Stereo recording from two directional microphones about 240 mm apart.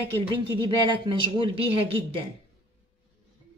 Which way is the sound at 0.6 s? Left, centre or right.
Centre.